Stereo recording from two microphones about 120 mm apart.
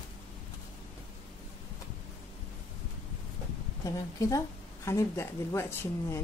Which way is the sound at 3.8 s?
25° left (ahead or behind).